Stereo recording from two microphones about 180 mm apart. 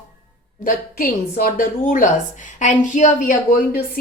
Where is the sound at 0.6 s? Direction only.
50° left (ahead or behind).